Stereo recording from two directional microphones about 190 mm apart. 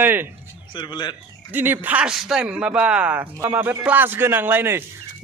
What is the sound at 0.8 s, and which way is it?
Speech, 25° left (ahead or behind).